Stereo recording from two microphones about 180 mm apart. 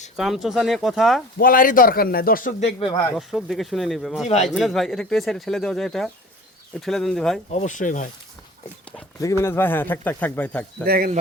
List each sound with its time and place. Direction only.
0.2 s speech: centre (ahead or behind)
1.4 s a man's voice: 50° left (ahead or behind)
3.2 s speech: centre (ahead or behind)
7.5 s a man's voice: 40° left (ahead or behind)
9.2 s a man's voice: 15° left (ahead or behind)
10.8 s speech: 60° right (ahead or behind)